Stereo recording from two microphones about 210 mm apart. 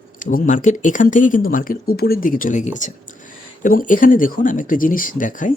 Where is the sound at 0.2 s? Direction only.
40° left (ahead or behind).